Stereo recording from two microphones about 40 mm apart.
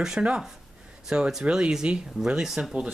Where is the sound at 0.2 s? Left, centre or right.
Right.